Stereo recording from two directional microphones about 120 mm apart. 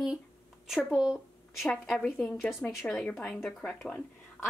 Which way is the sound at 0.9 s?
5° right (ahead or behind).